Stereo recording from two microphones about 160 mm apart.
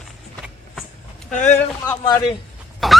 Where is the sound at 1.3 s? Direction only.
50° left (ahead or behind).